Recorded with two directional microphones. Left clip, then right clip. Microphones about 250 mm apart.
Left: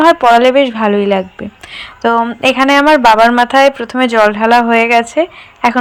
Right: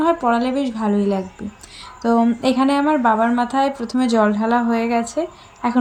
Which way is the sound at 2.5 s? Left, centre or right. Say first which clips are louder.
Left 12 dB; left.